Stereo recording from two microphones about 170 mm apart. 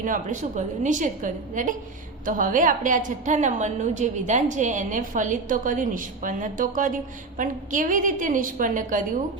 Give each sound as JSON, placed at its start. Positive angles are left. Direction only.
{"t": 0.0, "sound": "a woman's voice", "side_deg": -50}